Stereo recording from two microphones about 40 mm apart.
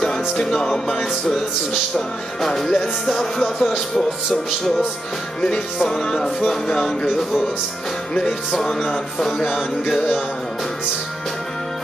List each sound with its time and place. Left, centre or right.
0.0 s music: centre
0.9 s speech: centre
2.4 s speech: centre
5.9 s speech: centre
8.5 s speech: centre